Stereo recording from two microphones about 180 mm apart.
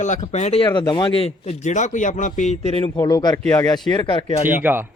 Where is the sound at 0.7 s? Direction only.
25° left (ahead or behind); by 2.7 s 40° left (ahead or behind).